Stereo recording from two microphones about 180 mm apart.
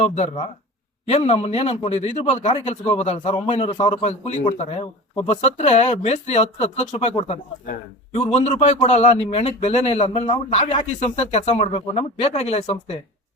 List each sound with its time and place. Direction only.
0.0 s a man's voice: 40° left (ahead or behind)